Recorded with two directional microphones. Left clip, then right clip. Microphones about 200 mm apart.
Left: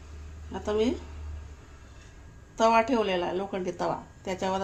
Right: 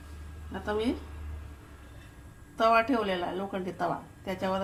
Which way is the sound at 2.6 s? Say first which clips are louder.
Left 2 dB; 40° left (ahead or behind).